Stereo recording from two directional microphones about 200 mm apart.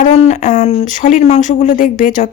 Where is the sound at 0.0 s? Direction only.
35° left (ahead or behind).